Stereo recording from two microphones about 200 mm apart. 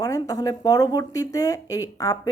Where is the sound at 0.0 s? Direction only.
15° left (ahead or behind).